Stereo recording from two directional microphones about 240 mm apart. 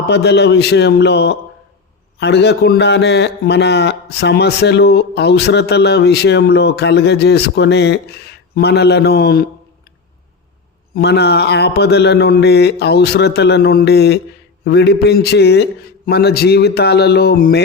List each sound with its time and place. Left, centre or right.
0.1 s a man's voice: left
10.9 s a man's voice: left